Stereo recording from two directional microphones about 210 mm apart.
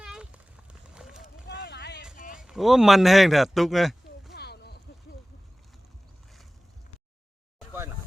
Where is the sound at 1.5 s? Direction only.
50° left (ahead or behind).